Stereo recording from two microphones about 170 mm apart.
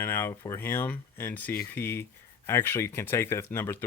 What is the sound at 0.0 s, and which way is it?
Speech, 15° left (ahead or behind).